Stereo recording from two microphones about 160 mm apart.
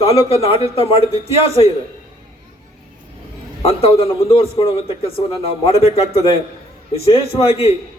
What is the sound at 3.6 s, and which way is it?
A man's voice, 35° left (ahead or behind).